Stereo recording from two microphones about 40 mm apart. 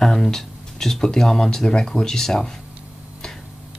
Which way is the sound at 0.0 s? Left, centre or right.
Centre.